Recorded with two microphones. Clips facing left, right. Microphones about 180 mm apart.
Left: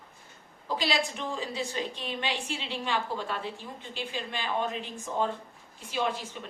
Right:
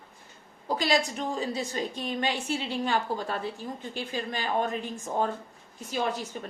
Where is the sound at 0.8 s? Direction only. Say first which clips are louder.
Right 4 dB; 45° right (ahead or behind).